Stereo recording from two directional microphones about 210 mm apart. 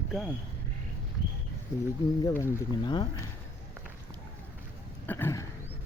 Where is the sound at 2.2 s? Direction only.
15° left (ahead or behind).